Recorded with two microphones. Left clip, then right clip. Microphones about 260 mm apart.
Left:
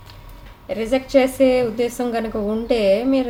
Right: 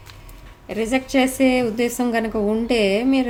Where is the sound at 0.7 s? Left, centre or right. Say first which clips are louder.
Left 4 dB; right.